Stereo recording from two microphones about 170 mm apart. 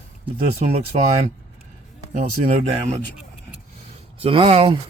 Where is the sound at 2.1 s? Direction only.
50° right (ahead or behind).